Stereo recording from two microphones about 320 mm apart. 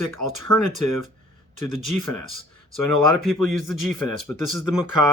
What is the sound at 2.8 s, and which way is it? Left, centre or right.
Speech, left.